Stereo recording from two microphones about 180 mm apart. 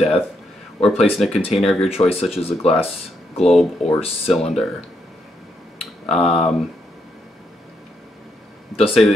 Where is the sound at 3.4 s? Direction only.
Centre (ahead or behind).